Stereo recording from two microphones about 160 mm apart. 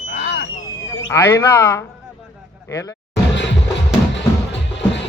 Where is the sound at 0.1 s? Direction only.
90° left.